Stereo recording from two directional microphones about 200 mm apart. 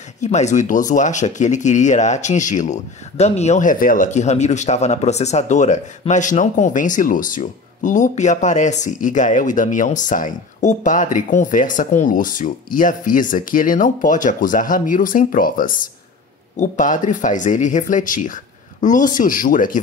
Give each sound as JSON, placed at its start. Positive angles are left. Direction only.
{"t": 0.2, "sound": "speech", "side_deg": 35}